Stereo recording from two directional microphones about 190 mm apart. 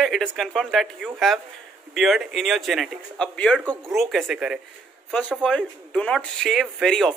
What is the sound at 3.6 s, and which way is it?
Speech, 10° right (ahead or behind).